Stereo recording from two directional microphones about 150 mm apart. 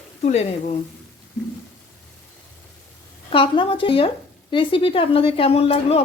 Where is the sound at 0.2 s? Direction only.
45° left (ahead or behind).